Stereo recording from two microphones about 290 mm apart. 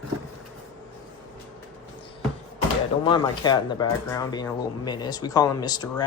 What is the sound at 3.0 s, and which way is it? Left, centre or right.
Speech, centre.